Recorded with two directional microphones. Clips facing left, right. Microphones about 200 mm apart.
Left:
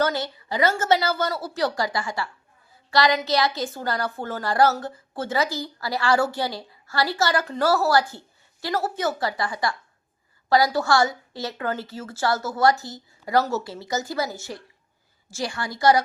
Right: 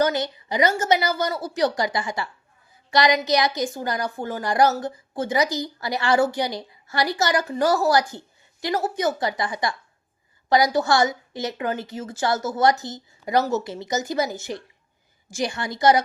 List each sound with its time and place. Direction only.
0.0 s a woman's voice: 15° right (ahead or behind)